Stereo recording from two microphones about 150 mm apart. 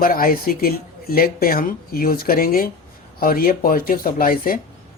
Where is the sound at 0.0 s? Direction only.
70° left (ahead or behind).